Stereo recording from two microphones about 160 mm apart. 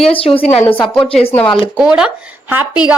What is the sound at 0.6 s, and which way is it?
Speech, 10° left (ahead or behind).